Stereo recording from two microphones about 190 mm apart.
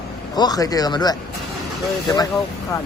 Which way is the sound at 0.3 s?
20° left (ahead or behind).